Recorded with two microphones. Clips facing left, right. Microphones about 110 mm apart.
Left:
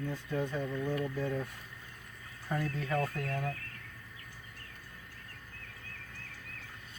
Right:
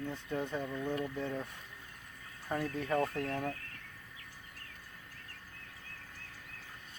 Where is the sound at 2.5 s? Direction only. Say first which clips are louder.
Even; 30° right (ahead or behind).